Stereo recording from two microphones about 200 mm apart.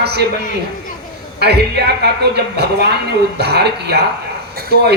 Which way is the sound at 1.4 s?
55° right (ahead or behind).